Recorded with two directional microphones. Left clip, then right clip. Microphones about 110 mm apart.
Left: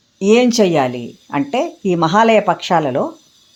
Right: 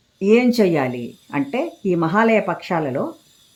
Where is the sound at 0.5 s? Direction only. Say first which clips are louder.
Left 4 dB; 15° left (ahead or behind).